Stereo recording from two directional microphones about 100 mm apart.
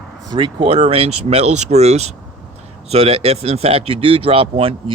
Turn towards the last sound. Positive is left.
turn(degrees=-70)  # may be behind; listen again after turning